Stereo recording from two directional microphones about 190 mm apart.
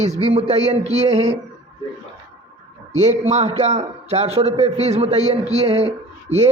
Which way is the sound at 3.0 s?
35° right (ahead or behind).